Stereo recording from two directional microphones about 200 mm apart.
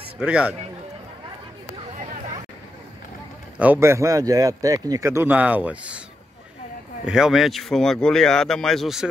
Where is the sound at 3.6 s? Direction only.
10° right (ahead or behind).